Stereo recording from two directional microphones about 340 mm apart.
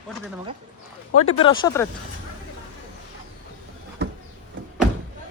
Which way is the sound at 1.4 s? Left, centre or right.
Centre.